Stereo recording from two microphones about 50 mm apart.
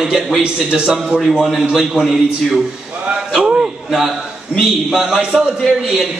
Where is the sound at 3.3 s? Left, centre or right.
Centre.